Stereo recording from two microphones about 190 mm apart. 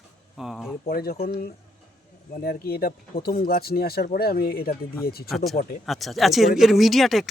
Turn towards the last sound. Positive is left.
turn(degrees=0)  # may be behind; listen again after turning